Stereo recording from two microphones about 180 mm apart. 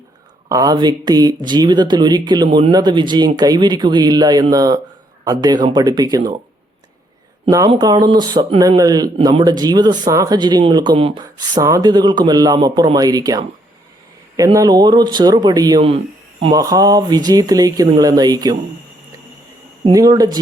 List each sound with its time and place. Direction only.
0.4 s speech: 20° right (ahead or behind)
7.4 s speech: 20° right (ahead or behind)
19.8 s speech: 20° right (ahead or behind)